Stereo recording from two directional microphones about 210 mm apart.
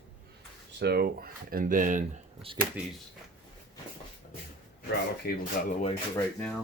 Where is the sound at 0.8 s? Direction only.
50° right (ahead or behind); by 2.5 s 30° right (ahead or behind).